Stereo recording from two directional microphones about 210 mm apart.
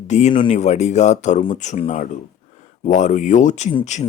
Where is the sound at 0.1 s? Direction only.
35° left (ahead or behind).